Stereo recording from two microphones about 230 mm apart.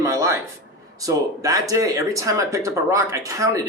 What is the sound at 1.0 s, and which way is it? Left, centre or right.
Speech, centre.